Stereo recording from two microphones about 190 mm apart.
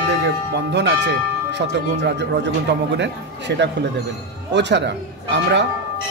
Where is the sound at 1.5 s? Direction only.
65° right (ahead or behind).